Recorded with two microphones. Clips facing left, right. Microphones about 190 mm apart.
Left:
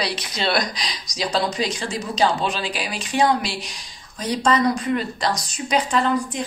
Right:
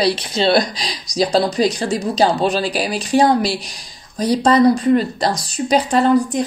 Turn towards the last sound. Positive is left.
turn(degrees=-40)  # may be behind; listen again after turning